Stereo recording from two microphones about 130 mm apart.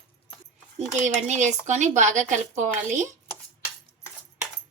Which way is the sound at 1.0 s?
65° right (ahead or behind).